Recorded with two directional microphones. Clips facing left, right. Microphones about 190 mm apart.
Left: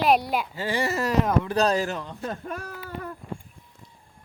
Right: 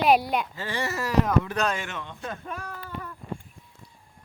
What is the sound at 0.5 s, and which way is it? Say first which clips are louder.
Speech: left 4 dB; 30° left (ahead or behind).